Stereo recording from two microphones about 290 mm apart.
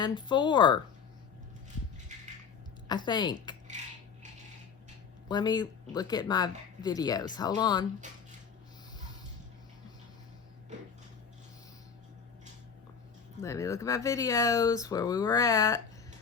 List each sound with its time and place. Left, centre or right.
0.0 s speech: centre
2.8 s speech: centre
5.3 s speech: centre
13.4 s speech: centre